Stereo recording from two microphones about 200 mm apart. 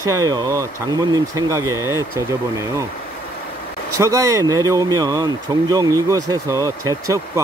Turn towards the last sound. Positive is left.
turn(degrees=-15)  # may be behind; listen again after turning